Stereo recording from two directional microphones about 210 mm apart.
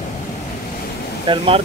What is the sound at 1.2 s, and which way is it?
Speech, 25° right (ahead or behind).